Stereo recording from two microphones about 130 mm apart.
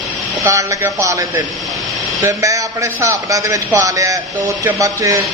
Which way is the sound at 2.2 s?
25° right (ahead or behind).